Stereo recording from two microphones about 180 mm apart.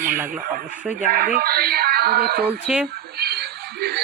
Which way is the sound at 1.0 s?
50° right (ahead or behind).